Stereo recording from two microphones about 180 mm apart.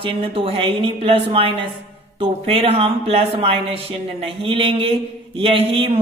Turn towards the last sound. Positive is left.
turn(degrees=-30)  # may be behind; listen again after turning